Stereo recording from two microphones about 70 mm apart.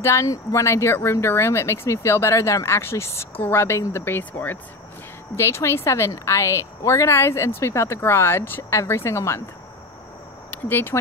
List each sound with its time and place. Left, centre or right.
0.0 s speech: left
5.3 s speech: left
10.7 s speech: left